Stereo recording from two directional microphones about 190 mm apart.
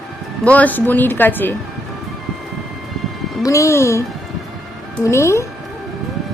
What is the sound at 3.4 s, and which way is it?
Speech, 15° left (ahead or behind).